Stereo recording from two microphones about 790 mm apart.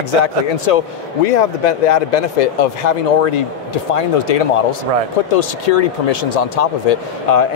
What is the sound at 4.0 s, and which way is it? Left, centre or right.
Speech, left.